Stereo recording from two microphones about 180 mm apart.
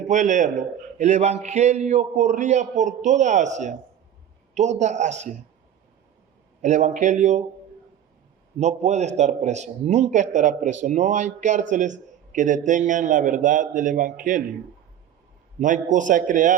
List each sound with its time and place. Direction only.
0.1 s a man's voice: 40° right (ahead or behind)
6.6 s a man's voice: 40° right (ahead or behind)
8.5 s a man's voice: 40° right (ahead or behind)
15.5 s a man's voice: 45° right (ahead or behind)